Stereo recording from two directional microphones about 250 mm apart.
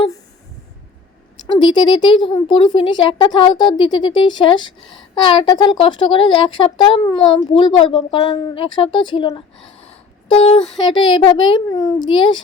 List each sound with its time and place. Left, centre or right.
1.5 s speech: centre